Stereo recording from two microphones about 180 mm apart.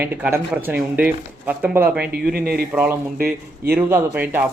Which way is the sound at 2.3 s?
60° right (ahead or behind).